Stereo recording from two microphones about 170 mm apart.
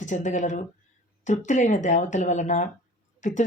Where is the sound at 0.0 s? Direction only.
45° left (ahead or behind).